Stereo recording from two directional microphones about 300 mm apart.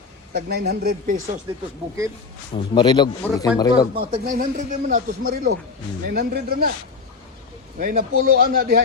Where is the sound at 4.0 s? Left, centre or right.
Right.